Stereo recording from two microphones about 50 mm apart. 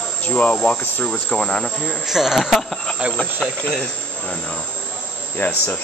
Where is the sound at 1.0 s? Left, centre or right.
Centre.